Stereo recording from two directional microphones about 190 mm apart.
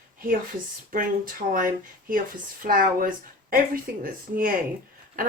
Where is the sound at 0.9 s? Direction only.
45° right (ahead or behind).